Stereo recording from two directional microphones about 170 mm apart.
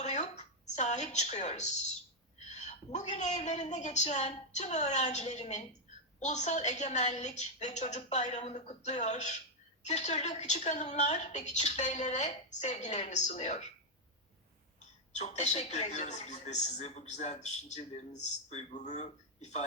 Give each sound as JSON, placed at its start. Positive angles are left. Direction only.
{"t": 0.0, "sound": "a sound", "side_deg": 40}
{"t": 2.4, "sound": "a woman's voice", "side_deg": 40}
{"t": 15.1, "sound": "speech", "side_deg": 40}